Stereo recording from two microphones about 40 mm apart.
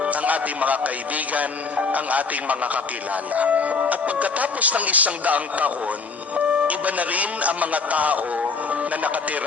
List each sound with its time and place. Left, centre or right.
0.0 s speech: right
8.4 s music: right